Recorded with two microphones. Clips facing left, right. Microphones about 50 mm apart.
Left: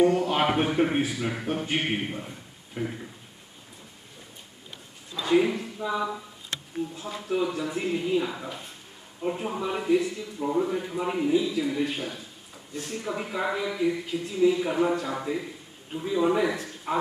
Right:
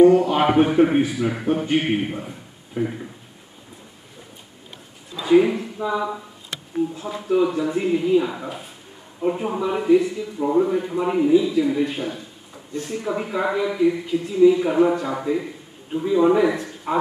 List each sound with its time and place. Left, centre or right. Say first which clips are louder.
0.0 s a man's voice: right 8 dB; centre
5.1 s speech: right 6 dB; centre